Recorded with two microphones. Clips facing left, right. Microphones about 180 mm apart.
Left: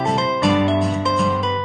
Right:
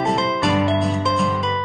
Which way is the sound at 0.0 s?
Centre (ahead or behind).